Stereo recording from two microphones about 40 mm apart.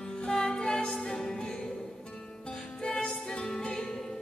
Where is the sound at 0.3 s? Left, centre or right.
Centre.